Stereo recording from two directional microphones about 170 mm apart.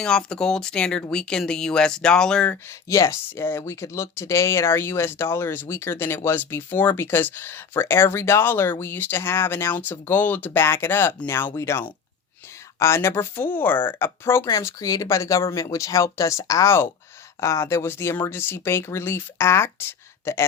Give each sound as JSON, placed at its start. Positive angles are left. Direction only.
{"t": 0.0, "sound": "speech", "side_deg": 5}
{"t": 2.9, "sound": "speech", "side_deg": 15}